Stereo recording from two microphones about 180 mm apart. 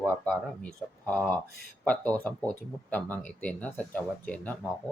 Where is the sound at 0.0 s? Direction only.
5° left (ahead or behind).